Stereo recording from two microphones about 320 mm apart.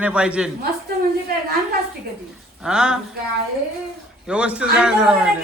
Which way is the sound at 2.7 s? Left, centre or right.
Centre.